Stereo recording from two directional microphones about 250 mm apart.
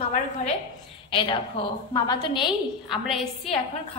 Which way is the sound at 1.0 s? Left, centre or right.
Centre.